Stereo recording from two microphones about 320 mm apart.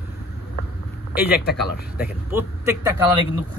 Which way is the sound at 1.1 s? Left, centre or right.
Left.